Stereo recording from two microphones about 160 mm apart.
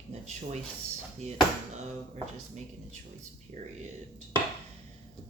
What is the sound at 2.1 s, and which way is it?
Speech, 45° right (ahead or behind).